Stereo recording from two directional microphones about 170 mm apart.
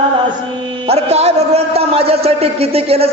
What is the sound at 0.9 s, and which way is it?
A man's voice, 35° right (ahead or behind).